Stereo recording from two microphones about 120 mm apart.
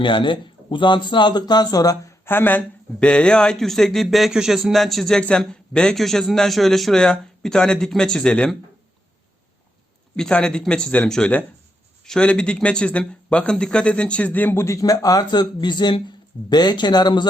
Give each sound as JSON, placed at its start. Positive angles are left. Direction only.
{"t": 0.0, "sound": "speech", "side_deg": 40}
{"t": 2.2, "sound": "speech", "side_deg": 15}
{"t": 10.2, "sound": "speech", "side_deg": 5}